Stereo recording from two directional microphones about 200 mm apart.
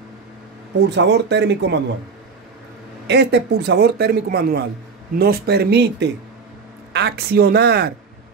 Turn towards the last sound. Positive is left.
turn(degrees=-50)  # may be behind; listen again after turning